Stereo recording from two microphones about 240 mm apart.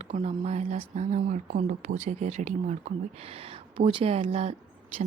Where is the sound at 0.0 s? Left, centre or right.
Right.